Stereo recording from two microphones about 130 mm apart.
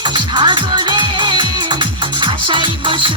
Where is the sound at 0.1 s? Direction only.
40° right (ahead or behind).